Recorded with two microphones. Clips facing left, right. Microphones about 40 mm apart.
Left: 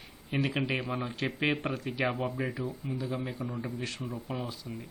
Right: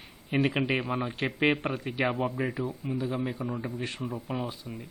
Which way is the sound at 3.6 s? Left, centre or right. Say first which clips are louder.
Right 2 dB; right.